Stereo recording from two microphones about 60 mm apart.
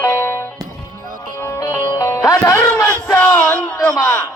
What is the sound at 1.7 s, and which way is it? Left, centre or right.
Music, left.